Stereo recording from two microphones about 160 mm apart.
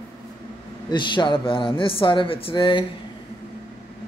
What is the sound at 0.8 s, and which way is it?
Speech, 30° left (ahead or behind).